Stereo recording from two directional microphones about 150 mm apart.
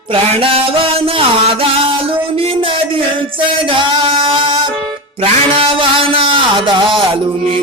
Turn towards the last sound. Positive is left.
turn(degrees=-30)  # may be behind; listen again after turning